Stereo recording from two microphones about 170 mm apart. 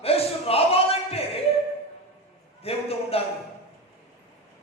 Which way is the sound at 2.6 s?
35° left (ahead or behind).